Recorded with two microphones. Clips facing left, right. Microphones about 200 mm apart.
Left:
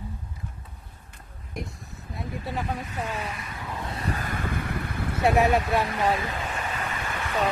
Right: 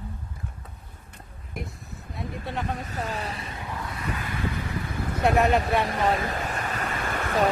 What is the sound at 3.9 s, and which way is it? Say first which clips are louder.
Wind: left 4 dB; 35° left (ahead or behind).